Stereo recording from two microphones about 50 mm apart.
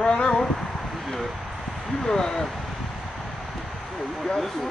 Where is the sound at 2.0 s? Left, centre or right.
Centre.